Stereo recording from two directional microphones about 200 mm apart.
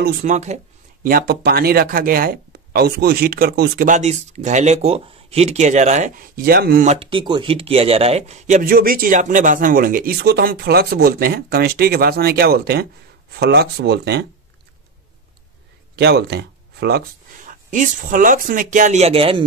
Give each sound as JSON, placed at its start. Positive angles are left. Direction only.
{"t": 0.0, "sound": "speech", "side_deg": -40}
{"t": 1.0, "sound": "speech", "side_deg": -50}
{"t": 6.8, "sound": "speech", "side_deg": -30}
{"t": 16.0, "sound": "speech", "side_deg": -55}
{"t": 17.5, "sound": "speech", "side_deg": -40}